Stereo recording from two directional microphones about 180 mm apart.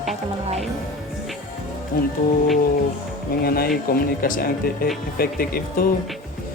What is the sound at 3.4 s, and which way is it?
Speech, 55° left (ahead or behind).